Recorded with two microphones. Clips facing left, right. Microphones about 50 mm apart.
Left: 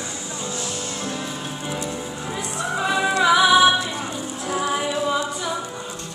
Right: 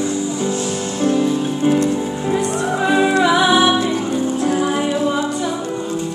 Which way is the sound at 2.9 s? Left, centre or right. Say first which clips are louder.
Right 3 dB; right.